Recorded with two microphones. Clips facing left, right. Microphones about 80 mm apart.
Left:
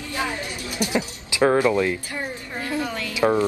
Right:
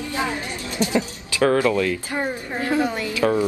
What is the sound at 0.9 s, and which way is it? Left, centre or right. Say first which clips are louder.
Speech: left 1 dB; centre.